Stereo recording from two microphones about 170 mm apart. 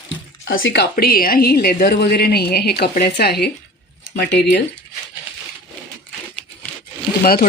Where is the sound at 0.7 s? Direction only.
70° left (ahead or behind).